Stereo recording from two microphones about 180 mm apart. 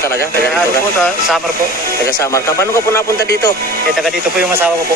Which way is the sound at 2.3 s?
15° left (ahead or behind).